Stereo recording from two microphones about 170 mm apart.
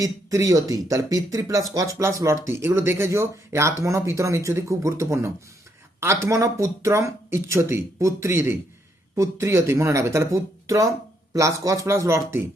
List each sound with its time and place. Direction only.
0.0 s speech: 20° right (ahead or behind)